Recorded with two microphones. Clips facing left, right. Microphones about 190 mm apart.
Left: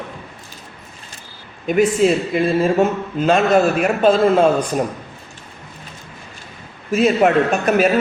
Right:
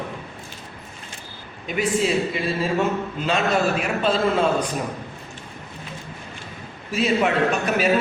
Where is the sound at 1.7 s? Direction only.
50° left (ahead or behind).